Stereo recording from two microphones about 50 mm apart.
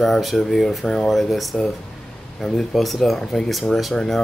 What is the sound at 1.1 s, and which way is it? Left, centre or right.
Speech, centre.